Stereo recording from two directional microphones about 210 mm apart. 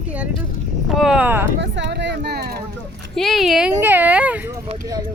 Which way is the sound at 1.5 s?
55° right (ahead or behind).